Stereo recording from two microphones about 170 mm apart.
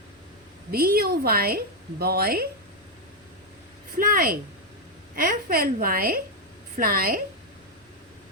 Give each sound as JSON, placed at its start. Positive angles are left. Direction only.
{"t": 0.7, "sound": "a woman's voice", "side_deg": -60}
{"t": 3.9, "sound": "a woman's voice", "side_deg": -55}